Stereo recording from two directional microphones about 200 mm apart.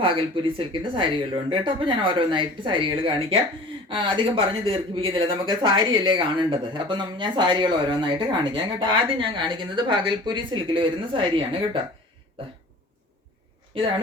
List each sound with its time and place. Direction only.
0.0 s speech: 25° right (ahead or behind)